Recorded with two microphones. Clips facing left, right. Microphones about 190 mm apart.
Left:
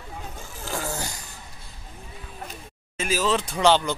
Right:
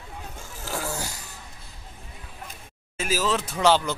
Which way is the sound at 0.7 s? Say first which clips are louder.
Even; 5° right (ahead or behind).